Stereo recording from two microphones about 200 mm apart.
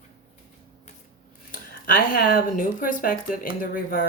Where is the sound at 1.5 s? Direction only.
45° left (ahead or behind).